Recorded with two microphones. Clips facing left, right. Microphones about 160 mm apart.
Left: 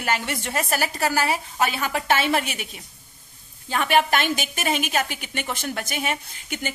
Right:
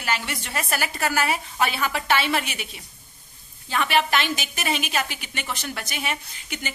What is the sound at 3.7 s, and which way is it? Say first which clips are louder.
A woman's voice: left 2 dB; 45° left (ahead or behind).